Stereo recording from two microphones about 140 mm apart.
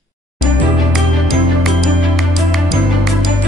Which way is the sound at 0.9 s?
Centre (ahead or behind).